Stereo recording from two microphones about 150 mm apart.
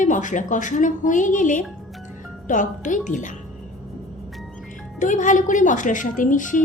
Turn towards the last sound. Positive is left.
turn(degrees=60)  # may be behind; listen again after turning